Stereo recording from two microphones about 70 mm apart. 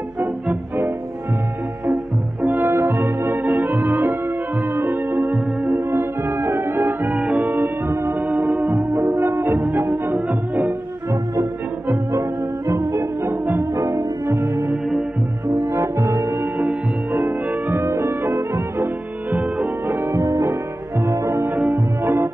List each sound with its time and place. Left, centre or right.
2.4 s music: right
7.1 s music: centre
7.9 s music: right
8.2 s music: right
12.1 s music: right
13.7 s music: right
17.1 s music: right
18.0 s music: right
19.9 s music: right
20.2 s music: right
21.1 s music: right
21.5 s music: right
22.0 s music: right